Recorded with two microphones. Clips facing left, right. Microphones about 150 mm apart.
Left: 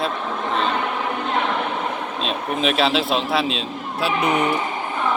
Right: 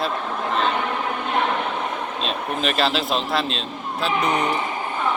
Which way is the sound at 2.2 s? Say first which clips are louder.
Left 3 dB; centre (ahead or behind).